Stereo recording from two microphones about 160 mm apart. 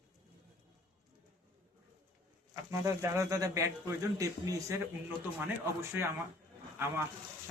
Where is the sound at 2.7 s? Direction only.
20° right (ahead or behind).